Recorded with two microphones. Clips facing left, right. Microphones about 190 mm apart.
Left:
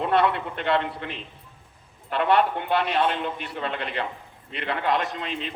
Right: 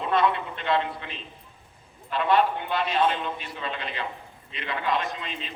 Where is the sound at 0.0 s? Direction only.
65° left (ahead or behind).